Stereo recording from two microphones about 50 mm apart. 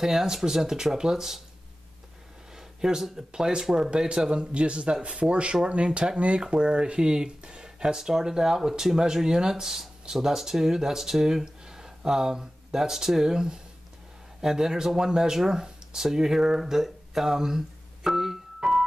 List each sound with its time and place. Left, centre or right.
0.0 s speech: centre
2.5 s speech: centre